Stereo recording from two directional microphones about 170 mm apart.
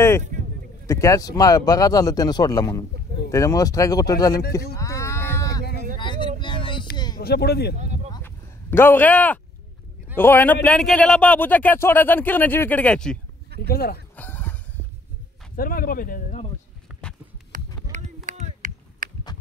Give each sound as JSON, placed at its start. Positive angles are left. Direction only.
{"t": 0.8, "sound": "speech", "side_deg": 20}
{"t": 4.7, "sound": "a sound", "side_deg": 15}
{"t": 5.9, "sound": "vehicle", "side_deg": 25}
{"t": 6.4, "sound": "a sound", "side_deg": 30}
{"t": 7.2, "sound": "speech", "side_deg": 70}
{"t": 8.2, "sound": "a sound", "side_deg": 15}
{"t": 10.1, "sound": "a man's voice", "side_deg": 10}
{"t": 13.6, "sound": "speech", "side_deg": 65}
{"t": 14.1, "sound": "fowl", "side_deg": 10}
{"t": 15.5, "sound": "speech", "side_deg": 60}
{"t": 17.9, "sound": "run", "side_deg": -45}